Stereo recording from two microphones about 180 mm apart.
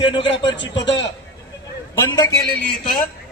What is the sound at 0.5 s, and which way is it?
Speech, 85° left.